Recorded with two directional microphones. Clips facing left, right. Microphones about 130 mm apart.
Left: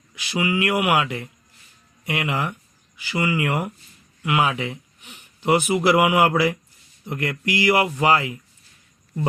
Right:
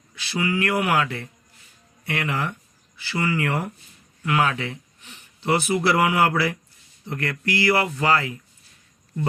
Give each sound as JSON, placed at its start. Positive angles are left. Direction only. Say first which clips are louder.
{"t": 0.2, "sound": "speech", "louder": "left 1 dB", "side_deg": 15}